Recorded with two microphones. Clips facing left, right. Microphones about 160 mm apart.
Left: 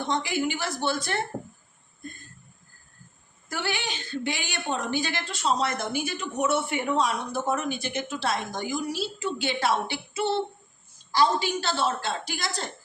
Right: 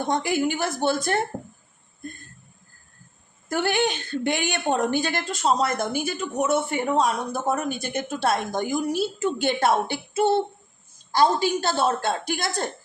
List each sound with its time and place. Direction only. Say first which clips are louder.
0.0 s a woman's voice: right 4 dB; 50° right (ahead or behind)
3.5 s a woman's voice: right 8 dB; 50° right (ahead or behind)